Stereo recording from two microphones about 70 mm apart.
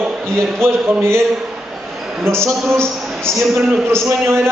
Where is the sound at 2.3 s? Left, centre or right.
Right.